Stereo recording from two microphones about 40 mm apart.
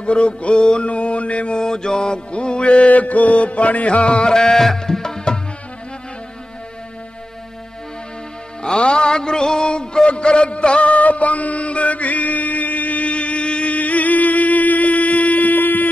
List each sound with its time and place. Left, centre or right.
0.0 s music: left
1.6 s music: centre
8.6 s music: left